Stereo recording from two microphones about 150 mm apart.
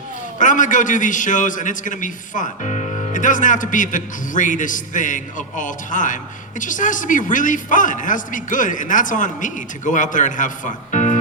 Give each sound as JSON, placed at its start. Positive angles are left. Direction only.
{"t": 0.3, "sound": "a man's voice", "side_deg": 60}